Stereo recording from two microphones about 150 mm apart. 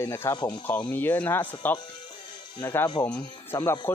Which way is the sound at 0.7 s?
10° left (ahead or behind).